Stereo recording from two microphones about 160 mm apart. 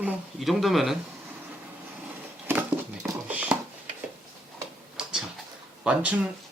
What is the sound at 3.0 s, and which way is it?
Clip-clop, 10° right (ahead or behind).